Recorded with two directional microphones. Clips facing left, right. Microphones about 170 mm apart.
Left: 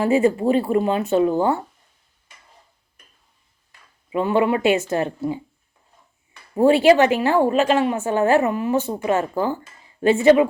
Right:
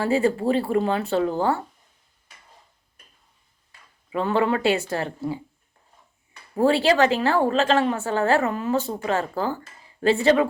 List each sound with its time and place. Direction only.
0.0 s speech: 20° left (ahead or behind)
4.1 s a woman's voice: 15° left (ahead or behind)
6.6 s a woman's voice: 20° left (ahead or behind)